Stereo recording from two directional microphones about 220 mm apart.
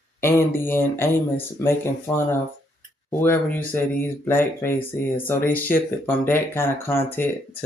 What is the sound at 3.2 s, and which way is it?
Speech, 10° left (ahead or behind).